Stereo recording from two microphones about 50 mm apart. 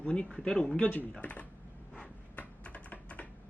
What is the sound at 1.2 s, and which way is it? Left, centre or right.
Speech, left.